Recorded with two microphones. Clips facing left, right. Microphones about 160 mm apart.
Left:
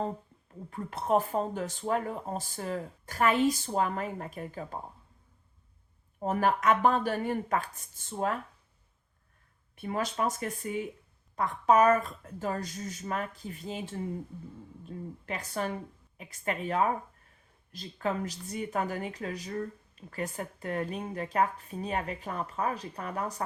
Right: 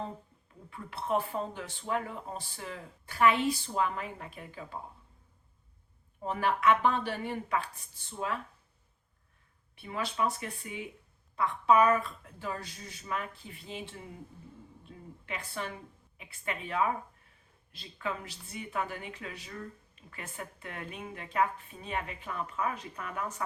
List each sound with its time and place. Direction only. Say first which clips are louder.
0.7 s speech: left 4 dB; 45° left (ahead or behind)
6.1 s speech: left 4 dB; 45° left (ahead or behind)
9.7 s speech: left 3 dB; 45° left (ahead or behind)